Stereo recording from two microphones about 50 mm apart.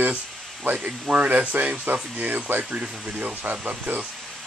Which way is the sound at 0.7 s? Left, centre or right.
Right.